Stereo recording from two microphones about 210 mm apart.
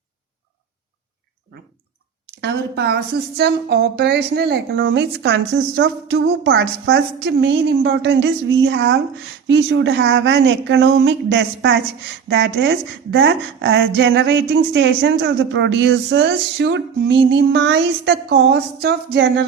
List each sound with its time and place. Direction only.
2.4 s speech: 50° right (ahead or behind)